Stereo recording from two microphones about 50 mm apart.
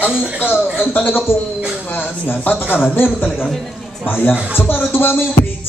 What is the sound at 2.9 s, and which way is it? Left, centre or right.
A man's voice, left.